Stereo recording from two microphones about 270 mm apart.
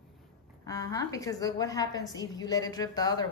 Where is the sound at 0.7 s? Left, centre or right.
Centre.